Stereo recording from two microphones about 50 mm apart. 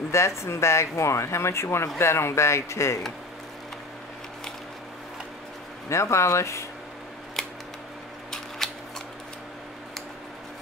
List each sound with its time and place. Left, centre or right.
0.1 s speech: left
5.9 s speech: left
8.3 s camera: centre